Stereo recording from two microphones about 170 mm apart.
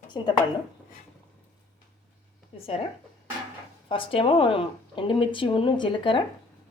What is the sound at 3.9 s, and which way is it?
Speech, 30° left (ahead or behind).